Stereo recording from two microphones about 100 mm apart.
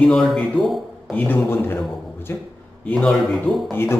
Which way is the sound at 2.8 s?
5° left (ahead or behind).